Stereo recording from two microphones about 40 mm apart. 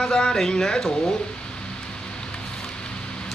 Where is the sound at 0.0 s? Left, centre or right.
Centre.